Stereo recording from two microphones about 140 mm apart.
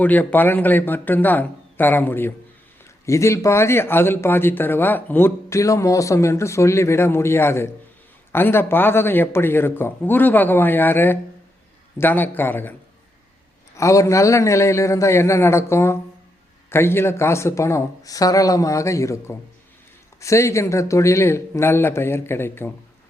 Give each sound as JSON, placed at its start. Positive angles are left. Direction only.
{"t": 0.0, "sound": "speech", "side_deg": 10}
{"t": 13.7, "sound": "speech", "side_deg": 20}